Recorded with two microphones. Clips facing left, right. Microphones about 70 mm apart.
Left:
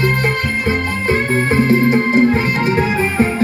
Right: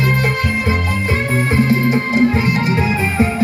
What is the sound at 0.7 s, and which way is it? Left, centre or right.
Music, left.